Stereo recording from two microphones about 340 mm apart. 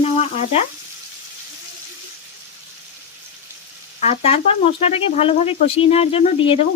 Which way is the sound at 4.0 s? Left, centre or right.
Centre.